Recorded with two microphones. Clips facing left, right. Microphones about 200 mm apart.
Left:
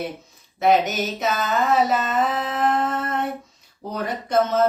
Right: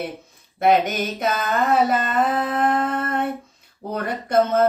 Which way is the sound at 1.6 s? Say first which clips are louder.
Right 1 dB; 55° right (ahead or behind).